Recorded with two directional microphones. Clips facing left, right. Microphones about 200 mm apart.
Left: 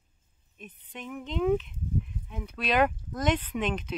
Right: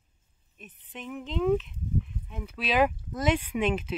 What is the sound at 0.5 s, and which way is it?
Speech, centre (ahead or behind).